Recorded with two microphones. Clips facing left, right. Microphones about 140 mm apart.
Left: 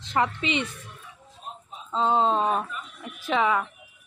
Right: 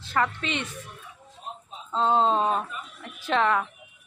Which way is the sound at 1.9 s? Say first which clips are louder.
Even; centre (ahead or behind).